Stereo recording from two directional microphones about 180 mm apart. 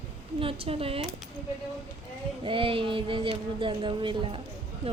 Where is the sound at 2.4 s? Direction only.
30° right (ahead or behind).